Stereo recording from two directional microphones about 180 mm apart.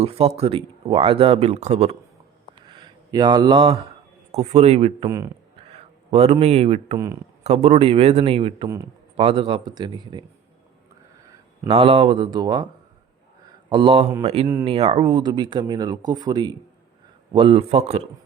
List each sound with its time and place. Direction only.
0.0 s speech: 35° right (ahead or behind)
2.6 s a sound: 25° right (ahead or behind)
4.3 s speech: 35° right (ahead or behind)
5.7 s a sound: 35° right (ahead or behind)
6.4 s speech: 35° right (ahead or behind)
11.7 s speech: 30° right (ahead or behind)
13.7 s speech: 30° right (ahead or behind)